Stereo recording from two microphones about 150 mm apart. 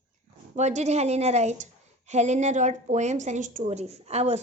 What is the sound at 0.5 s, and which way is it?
A woman's voice, 50° right (ahead or behind).